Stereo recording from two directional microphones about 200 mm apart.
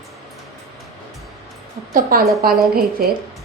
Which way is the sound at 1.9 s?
45° right (ahead or behind).